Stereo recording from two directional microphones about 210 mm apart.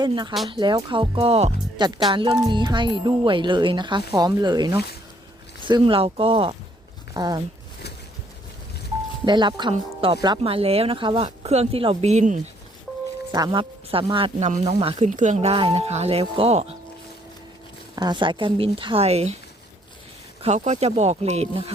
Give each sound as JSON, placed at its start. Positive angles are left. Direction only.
{"t": 0.0, "sound": "speech", "side_deg": -20}
{"t": 9.2, "sound": "speech", "side_deg": -20}
{"t": 13.3, "sound": "speech", "side_deg": -20}
{"t": 17.9, "sound": "speech", "side_deg": -20}
{"t": 20.4, "sound": "speech", "side_deg": -30}